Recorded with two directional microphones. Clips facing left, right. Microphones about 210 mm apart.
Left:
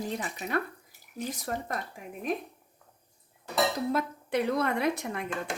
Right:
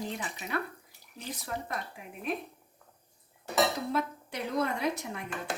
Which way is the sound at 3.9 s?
60° left (ahead or behind).